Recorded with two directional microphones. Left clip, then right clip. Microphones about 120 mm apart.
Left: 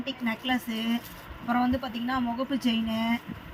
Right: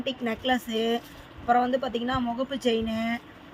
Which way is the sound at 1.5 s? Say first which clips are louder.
Right 5 dB; 90° right.